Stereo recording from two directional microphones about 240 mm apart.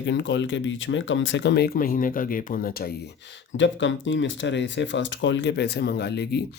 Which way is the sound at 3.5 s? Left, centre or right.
Left.